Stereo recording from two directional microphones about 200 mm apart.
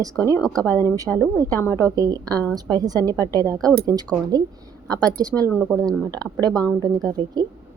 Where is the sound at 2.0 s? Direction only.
15° right (ahead or behind).